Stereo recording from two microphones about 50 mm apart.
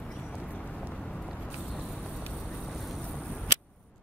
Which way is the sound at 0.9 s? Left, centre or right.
Centre.